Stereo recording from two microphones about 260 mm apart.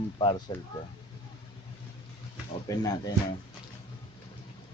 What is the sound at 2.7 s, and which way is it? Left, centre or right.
Speech, centre.